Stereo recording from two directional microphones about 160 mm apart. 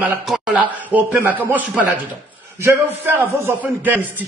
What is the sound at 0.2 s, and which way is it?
A man's voice, 5° right (ahead or behind).